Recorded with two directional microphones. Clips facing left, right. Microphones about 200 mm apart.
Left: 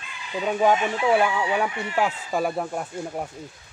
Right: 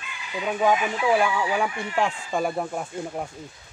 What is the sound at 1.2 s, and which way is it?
Speech, centre (ahead or behind).